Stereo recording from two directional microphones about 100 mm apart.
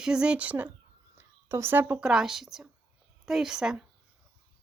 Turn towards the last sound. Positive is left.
turn(degrees=-5)  # may be behind; listen again after turning